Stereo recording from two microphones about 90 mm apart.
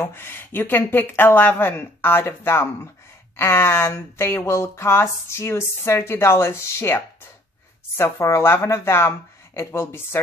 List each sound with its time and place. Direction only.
0.0 s speech: 25° left (ahead or behind)
8.0 s speech: 30° left (ahead or behind)